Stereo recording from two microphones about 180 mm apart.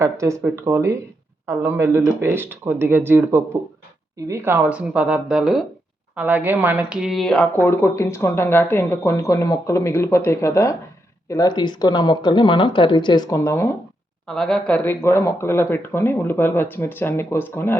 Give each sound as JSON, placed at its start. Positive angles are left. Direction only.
{"t": 0.0, "sound": "speech", "side_deg": -15}
{"t": 14.3, "sound": "speech", "side_deg": 5}